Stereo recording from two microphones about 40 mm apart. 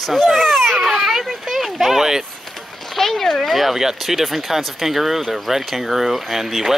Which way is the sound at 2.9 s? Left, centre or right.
Centre.